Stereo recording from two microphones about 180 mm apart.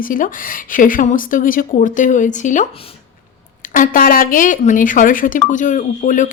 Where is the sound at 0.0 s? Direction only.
50° left (ahead or behind).